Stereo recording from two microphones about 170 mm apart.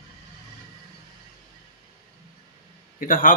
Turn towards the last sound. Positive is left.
turn(degrees=55)  # may be behind; listen again after turning